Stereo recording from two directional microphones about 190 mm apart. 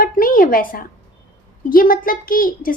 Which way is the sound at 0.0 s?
50° left (ahead or behind).